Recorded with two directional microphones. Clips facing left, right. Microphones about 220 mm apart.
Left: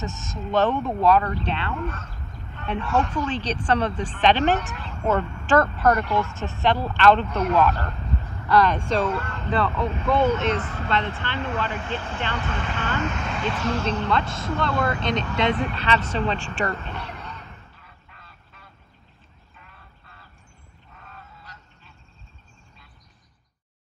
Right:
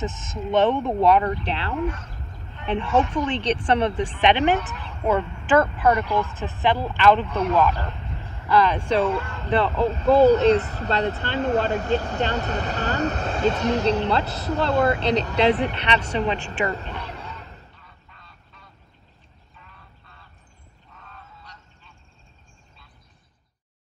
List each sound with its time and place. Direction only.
0.5 s speech: 25° right (ahead or behind)
0.7 s speech: 15° right (ahead or behind)
9.5 s speech: 25° right (ahead or behind)
16.8 s honk: 10° right (ahead or behind)
18.1 s a sound: 5° left (ahead or behind)